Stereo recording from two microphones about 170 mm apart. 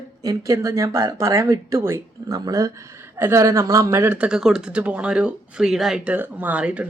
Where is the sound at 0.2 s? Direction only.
20° right (ahead or behind).